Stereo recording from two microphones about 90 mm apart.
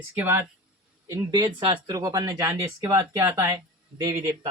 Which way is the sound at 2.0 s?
40° right (ahead or behind).